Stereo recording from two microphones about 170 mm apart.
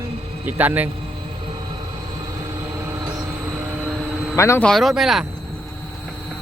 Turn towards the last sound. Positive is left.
turn(degrees=0)  # may be behind; listen again after turning